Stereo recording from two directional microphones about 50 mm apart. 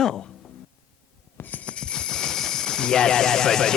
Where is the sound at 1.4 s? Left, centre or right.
Left.